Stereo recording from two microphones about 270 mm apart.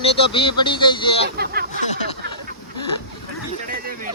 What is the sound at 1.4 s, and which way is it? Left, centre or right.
Speech, right.